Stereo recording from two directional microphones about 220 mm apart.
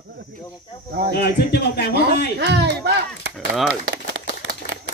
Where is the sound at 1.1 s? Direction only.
45° left (ahead or behind).